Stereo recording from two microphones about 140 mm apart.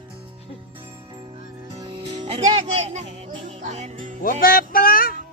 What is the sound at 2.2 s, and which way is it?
Music, 55° right (ahead or behind).